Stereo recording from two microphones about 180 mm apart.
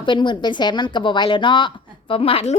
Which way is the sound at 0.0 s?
25° left (ahead or behind).